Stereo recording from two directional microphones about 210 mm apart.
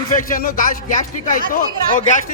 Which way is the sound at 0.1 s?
40° left (ahead or behind).